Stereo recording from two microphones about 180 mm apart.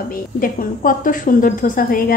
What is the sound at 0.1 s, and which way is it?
A woman's voice, 50° left (ahead or behind).